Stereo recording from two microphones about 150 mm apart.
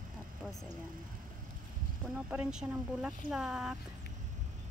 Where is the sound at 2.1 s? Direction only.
10° right (ahead or behind).